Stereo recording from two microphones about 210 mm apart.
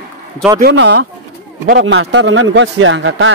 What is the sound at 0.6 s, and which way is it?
Speech, 55° right (ahead or behind).